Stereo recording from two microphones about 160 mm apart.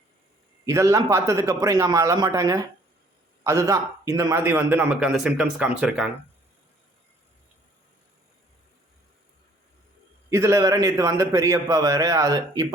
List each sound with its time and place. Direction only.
0.6 s a man's voice: 20° right (ahead or behind)
10.2 s a man's voice: 15° right (ahead or behind)